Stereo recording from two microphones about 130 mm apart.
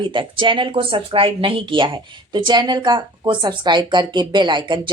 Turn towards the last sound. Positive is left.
turn(degrees=-35)  # may be behind; listen again after turning